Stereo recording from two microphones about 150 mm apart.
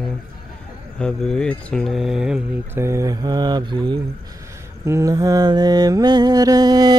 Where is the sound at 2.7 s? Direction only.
20° right (ahead or behind).